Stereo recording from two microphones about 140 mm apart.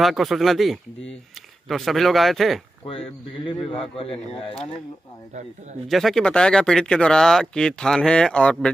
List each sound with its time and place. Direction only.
0.0 s speech: centre (ahead or behind)
2.9 s a man's voice: 35° left (ahead or behind)
5.9 s speech: centre (ahead or behind)